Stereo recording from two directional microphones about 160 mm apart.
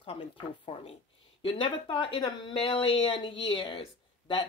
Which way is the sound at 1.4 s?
30° left (ahead or behind).